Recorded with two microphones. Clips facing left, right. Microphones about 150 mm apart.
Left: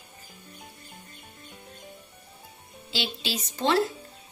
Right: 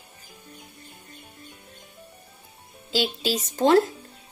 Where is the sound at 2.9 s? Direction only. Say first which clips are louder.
Right 7 dB; 45° right (ahead or behind).